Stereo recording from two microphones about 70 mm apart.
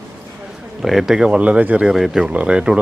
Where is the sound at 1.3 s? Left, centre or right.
Centre.